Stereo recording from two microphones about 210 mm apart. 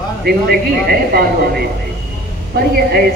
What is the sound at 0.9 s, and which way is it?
Speech, 50° right (ahead or behind).